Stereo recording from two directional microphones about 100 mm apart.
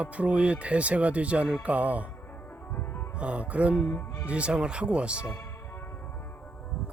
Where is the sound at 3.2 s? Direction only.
10° right (ahead or behind).